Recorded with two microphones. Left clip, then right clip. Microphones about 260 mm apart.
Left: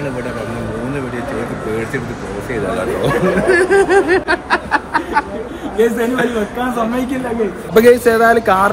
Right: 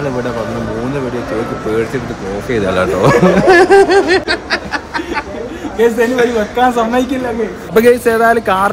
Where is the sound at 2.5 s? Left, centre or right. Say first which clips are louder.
Right 5 dB; right.